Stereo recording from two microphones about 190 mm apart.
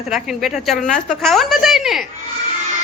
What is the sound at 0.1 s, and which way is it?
A woman's voice, centre (ahead or behind).